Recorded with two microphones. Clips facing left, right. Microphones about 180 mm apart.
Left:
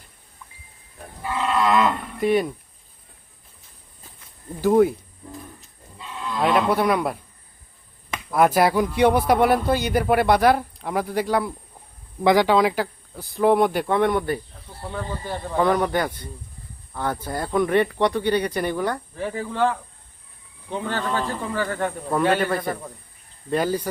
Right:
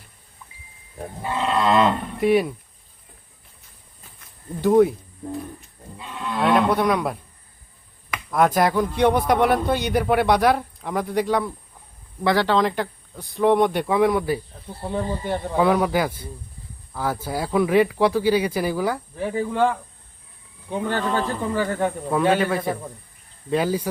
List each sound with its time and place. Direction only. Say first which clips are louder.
1.2 s livestock: even; 30° right (ahead or behind)
2.2 s speech: right 2 dB; 5° right (ahead or behind)
4.6 s speech: right 1 dB; centre (ahead or behind)
6.4 s speech: right 1 dB; 5° left (ahead or behind)
8.3 s speech: left 1 dB; 5° left (ahead or behind)
12.2 s speech: left 2 dB; 15° left (ahead or behind); by 14.4 s centre (ahead or behind)
14.8 s speech: right 5 dB; 25° right (ahead or behind)
15.5 s speech: right 1 dB; 5° right (ahead or behind)